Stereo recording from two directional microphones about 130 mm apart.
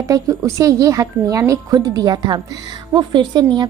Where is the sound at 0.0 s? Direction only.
25° right (ahead or behind).